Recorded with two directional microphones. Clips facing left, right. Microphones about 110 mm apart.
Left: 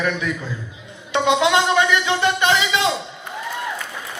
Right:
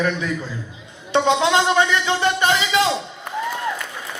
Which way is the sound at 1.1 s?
35° right (ahead or behind).